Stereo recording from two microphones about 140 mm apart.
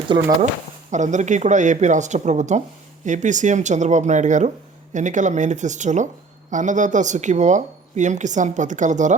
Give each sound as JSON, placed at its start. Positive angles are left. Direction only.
{"t": 0.1, "sound": "speech", "side_deg": -30}
{"t": 0.9, "sound": "speech", "side_deg": -60}